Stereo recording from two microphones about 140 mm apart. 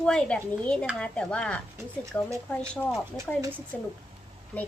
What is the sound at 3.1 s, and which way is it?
Speech, 20° right (ahead or behind).